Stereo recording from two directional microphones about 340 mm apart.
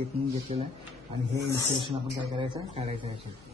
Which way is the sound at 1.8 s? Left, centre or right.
Centre.